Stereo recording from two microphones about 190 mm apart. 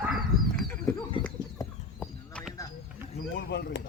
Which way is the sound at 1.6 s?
5° left (ahead or behind).